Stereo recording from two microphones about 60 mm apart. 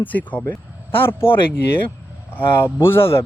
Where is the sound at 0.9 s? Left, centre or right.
Left.